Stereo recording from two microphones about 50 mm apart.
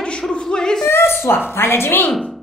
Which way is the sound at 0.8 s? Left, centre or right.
Left.